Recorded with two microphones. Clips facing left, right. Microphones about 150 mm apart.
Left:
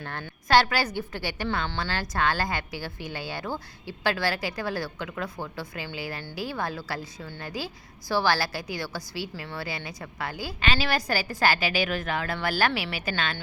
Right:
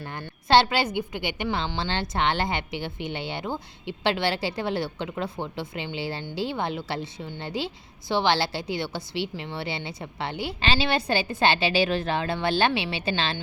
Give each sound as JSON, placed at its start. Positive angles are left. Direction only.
{"t": 0.0, "sound": "a woman's voice", "side_deg": -15}
{"t": 0.4, "sound": "a woman's voice", "side_deg": -25}